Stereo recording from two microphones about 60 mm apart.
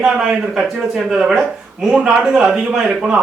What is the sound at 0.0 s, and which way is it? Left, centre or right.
Speech, centre.